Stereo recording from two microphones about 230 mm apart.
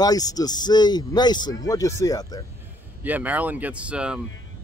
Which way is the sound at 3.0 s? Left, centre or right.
Centre.